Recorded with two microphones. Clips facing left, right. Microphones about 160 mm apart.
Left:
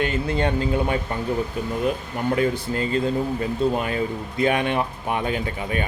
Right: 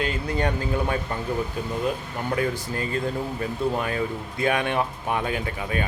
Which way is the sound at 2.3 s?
25° left (ahead or behind).